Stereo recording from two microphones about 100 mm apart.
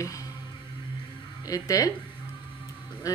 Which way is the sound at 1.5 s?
35° left (ahead or behind).